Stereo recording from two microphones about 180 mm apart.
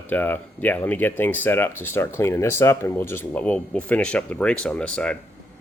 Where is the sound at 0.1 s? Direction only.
10° left (ahead or behind).